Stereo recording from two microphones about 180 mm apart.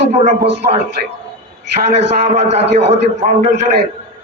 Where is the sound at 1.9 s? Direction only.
35° right (ahead or behind).